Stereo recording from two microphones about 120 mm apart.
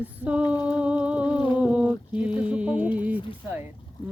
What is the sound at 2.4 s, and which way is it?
Music, 10° right (ahead or behind).